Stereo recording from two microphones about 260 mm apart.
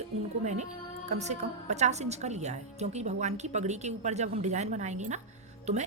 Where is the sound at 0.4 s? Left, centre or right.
Right.